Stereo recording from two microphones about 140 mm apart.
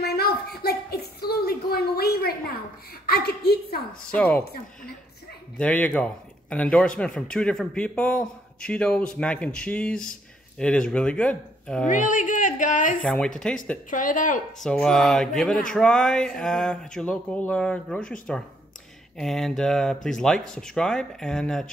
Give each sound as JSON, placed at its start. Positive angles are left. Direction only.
{"t": 0.2, "sound": "a sound", "side_deg": 90}
{"t": 4.1, "sound": "speech", "side_deg": 10}
{"t": 5.6, "sound": "speech", "side_deg": 10}
{"t": 11.9, "sound": "speech", "side_deg": 65}
{"t": 13.0, "sound": "speech", "side_deg": 5}
{"t": 13.8, "sound": "speech", "side_deg": 70}
{"t": 14.6, "sound": "speech", "side_deg": 5}